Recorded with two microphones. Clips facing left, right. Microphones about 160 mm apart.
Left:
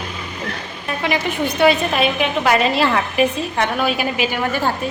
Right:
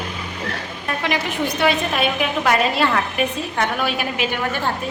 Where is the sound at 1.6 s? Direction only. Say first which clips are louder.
Left 5 dB; centre (ahead or behind).